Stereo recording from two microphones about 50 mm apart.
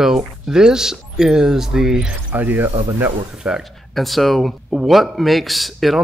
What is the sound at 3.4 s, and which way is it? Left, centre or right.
Speech, right.